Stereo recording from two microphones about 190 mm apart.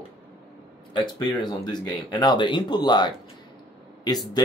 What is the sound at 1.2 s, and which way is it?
Speech, 25° left (ahead or behind).